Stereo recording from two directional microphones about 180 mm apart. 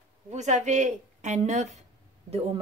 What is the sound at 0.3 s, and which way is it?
Speech, 40° right (ahead or behind).